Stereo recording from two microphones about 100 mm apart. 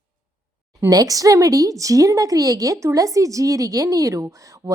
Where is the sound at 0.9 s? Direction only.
35° right (ahead or behind).